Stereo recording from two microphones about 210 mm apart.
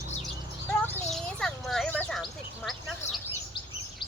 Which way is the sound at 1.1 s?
Centre (ahead or behind).